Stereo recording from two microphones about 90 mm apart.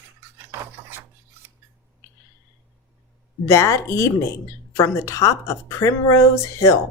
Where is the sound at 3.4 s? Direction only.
35° left (ahead or behind).